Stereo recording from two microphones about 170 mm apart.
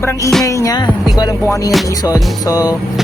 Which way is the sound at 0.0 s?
15° left (ahead or behind).